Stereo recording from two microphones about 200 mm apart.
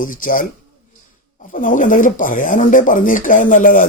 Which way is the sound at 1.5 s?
40° left (ahead or behind).